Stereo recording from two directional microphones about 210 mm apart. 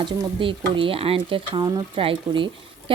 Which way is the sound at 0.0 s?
25° right (ahead or behind).